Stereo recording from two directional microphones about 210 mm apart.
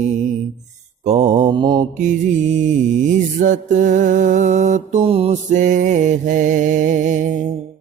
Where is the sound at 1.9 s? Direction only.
35° right (ahead or behind).